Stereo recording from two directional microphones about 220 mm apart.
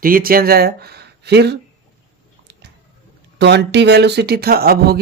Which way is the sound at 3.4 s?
50° right (ahead or behind).